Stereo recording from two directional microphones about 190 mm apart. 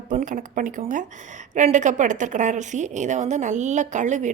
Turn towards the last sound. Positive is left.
turn(degrees=-40)  # may be behind; listen again after turning